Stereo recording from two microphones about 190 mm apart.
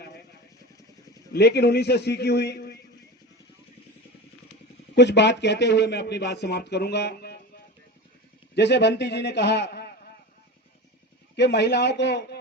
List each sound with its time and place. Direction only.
1.3 s speech: 60° left (ahead or behind)
4.9 s speech: 65° left (ahead or behind)
8.5 s speech: 65° left (ahead or behind)
11.3 s speech: 65° left (ahead or behind)